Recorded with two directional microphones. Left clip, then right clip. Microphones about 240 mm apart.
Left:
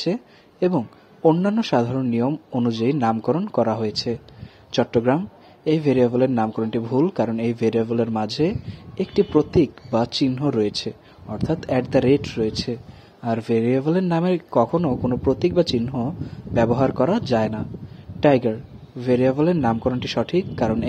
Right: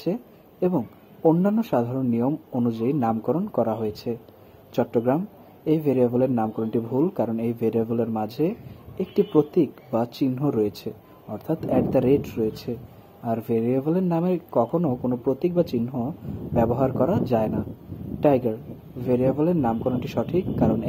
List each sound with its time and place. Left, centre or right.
0.0 s a man's voice: left